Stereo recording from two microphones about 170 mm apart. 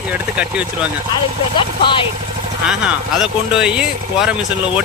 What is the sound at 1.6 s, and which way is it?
Speech, 30° left (ahead or behind).